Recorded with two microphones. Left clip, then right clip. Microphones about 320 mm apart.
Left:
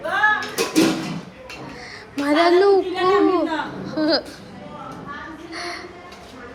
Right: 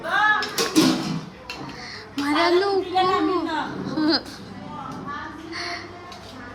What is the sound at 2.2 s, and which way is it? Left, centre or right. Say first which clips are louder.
A child's voice: left 4 dB; centre.